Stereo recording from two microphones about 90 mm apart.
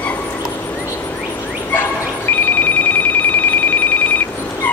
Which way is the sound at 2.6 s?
20° left (ahead or behind).